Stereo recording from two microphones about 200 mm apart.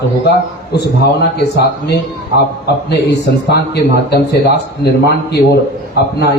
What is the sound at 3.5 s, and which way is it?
A man's voice, 55° left (ahead or behind).